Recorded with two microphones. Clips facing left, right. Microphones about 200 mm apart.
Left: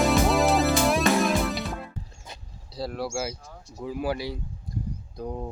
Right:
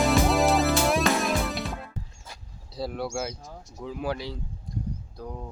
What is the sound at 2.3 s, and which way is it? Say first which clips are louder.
Dog: left 3 dB; 20° left (ahead or behind).